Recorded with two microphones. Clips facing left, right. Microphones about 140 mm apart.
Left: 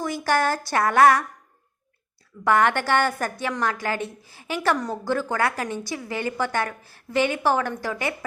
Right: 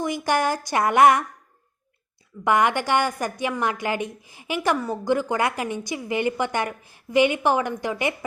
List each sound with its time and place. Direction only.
0.0 s a woman's voice: 15° right (ahead or behind)
2.4 s a woman's voice: 15° right (ahead or behind)